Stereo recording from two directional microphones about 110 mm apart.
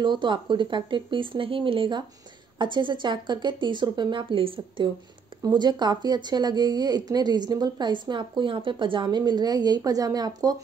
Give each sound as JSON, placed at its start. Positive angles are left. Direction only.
{"t": 0.0, "sound": "speech", "side_deg": -45}
{"t": 5.4, "sound": "speech", "side_deg": -40}